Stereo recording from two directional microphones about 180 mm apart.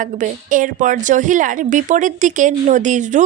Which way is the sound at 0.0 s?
45° right (ahead or behind).